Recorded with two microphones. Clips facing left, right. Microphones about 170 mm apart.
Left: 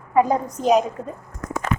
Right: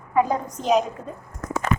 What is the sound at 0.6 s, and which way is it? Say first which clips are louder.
Speech: left 3 dB; 40° left (ahead or behind).